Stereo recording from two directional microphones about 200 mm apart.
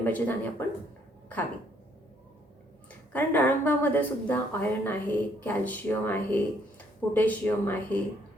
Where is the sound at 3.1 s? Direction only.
10° left (ahead or behind).